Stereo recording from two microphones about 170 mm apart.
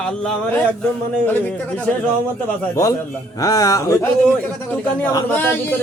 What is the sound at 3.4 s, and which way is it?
Speech, 20° left (ahead or behind).